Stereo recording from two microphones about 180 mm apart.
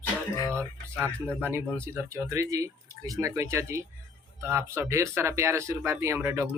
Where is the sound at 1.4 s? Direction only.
10° right (ahead or behind).